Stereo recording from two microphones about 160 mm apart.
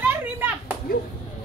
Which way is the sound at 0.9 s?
70° left (ahead or behind).